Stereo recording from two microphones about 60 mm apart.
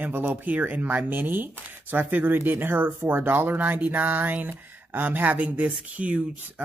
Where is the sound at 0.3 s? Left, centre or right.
Right.